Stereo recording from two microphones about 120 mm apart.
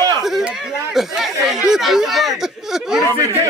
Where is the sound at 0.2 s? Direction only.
5° right (ahead or behind).